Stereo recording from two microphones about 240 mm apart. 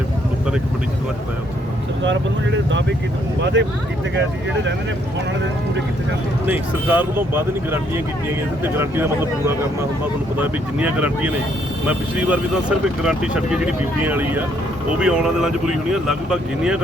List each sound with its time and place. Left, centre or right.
3.4 s speech: right
6.4 s speech: centre
8.6 s speech: centre
10.3 s speech: centre